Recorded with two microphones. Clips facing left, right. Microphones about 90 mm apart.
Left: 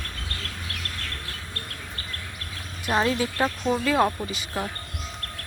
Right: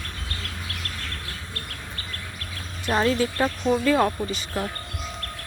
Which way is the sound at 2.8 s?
10° left (ahead or behind).